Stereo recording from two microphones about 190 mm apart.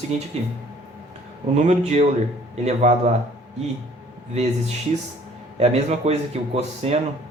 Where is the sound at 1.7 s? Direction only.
35° right (ahead or behind).